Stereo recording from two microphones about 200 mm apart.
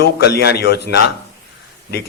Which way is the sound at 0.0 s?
55° left (ahead or behind).